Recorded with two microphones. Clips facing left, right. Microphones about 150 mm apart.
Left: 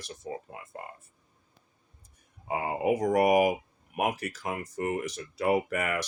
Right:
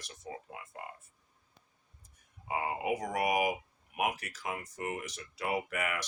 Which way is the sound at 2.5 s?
35° left (ahead or behind).